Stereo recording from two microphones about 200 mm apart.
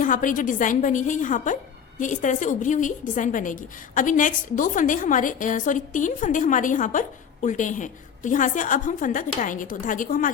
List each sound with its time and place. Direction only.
0.0 s a woman's voice: 40° left (ahead or behind)